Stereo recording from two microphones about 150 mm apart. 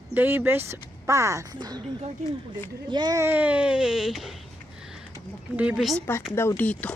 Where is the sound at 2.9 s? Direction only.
25° right (ahead or behind).